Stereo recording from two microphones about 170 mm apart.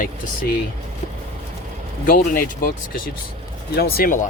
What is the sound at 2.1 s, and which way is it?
Speech, 60° left (ahead or behind).